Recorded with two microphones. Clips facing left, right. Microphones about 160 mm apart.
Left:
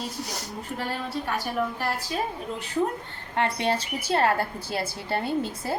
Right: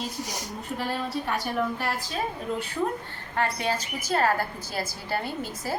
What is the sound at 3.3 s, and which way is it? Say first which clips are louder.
A woman's voice: left 2 dB; 30° left (ahead or behind).